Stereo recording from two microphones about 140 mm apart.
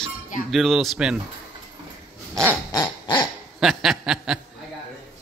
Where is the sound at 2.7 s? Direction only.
30° left (ahead or behind).